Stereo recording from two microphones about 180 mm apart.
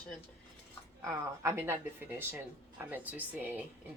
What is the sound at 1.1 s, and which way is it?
Speech, 15° right (ahead or behind).